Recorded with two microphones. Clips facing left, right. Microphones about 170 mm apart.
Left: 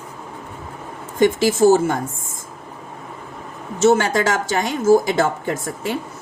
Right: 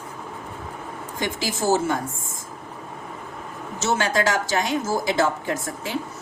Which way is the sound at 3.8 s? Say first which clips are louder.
Left 7 dB; 55° left (ahead or behind).